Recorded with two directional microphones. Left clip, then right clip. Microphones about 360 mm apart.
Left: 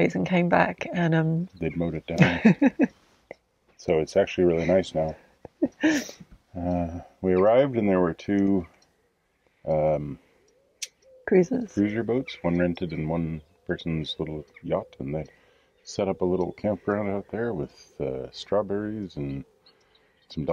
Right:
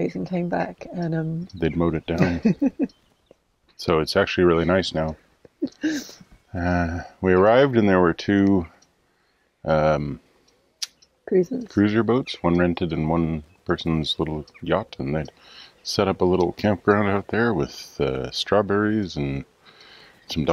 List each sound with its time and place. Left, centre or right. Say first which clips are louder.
0.0 s speech: left 3 dB; left
1.6 s speech: right 9 dB; right
2.1 s speech: left 1 dB; centre
3.8 s speech: right 2 dB; right
5.6 s a sound: left 3 dB; left
6.5 s speech: right 5 dB; right
9.7 s speech: right 4 dB; right
11.2 s speech: even; centre
11.7 s speech: right 10 dB; right